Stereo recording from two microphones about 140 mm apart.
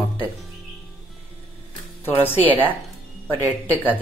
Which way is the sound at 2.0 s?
15° left (ahead or behind).